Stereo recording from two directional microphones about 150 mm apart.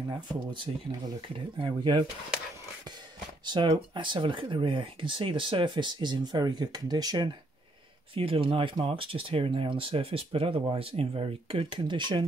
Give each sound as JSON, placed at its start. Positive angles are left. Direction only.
{"t": 0.7, "sound": "speech", "side_deg": -40}
{"t": 3.4, "sound": "speech", "side_deg": -30}
{"t": 8.1, "sound": "speech", "side_deg": -35}